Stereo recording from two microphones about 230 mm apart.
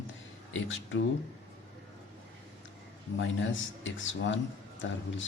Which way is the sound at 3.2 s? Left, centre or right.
Left.